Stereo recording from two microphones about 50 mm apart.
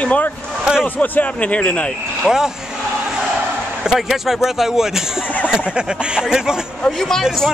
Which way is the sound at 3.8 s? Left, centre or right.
Centre.